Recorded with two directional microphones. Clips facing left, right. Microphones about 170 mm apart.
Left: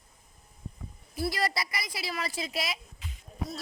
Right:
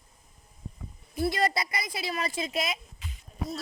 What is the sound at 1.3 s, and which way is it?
A woman's voice, 25° right (ahead or behind).